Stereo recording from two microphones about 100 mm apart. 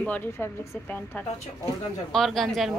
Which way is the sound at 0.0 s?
15° left (ahead or behind).